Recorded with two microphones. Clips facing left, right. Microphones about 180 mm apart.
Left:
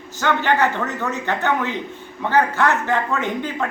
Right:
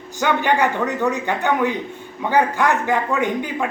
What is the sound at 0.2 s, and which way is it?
A man's voice, 15° right (ahead or behind).